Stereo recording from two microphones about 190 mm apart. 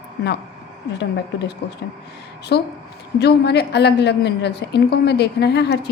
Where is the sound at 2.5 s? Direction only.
60° left (ahead or behind).